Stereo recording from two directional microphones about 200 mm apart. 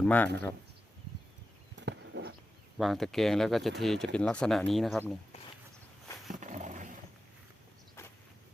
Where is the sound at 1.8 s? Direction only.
60° right (ahead or behind).